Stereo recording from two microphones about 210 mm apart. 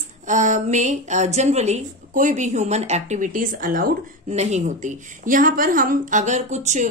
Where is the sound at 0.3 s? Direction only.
35° right (ahead or behind).